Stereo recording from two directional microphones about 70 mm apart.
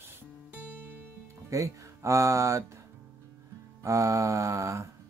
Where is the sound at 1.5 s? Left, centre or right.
Right.